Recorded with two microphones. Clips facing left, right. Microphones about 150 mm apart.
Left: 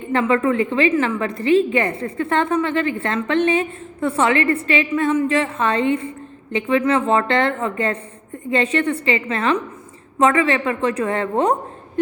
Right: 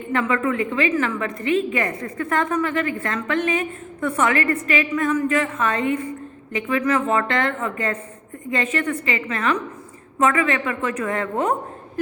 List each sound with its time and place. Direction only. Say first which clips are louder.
0.1 s a woman's voice: left 4 dB; 30° left (ahead or behind)